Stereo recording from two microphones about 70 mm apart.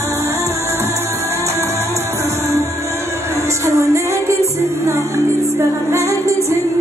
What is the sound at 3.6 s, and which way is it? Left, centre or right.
Music, right.